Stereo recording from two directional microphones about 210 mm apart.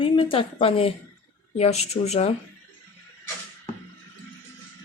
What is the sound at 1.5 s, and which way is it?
Speech, 30° left (ahead or behind).